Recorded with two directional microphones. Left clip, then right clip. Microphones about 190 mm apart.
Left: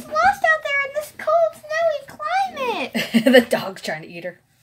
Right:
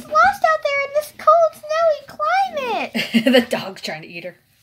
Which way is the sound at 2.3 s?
45° right (ahead or behind).